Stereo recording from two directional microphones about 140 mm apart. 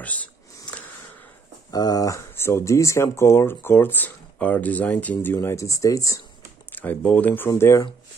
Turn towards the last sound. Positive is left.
turn(degrees=20)  # may be behind; listen again after turning